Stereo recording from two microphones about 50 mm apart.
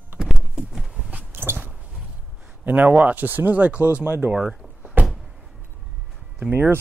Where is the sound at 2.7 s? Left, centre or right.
Right.